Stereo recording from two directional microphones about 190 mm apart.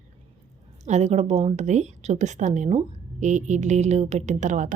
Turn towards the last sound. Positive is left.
turn(degrees=-40)  # may be behind; listen again after turning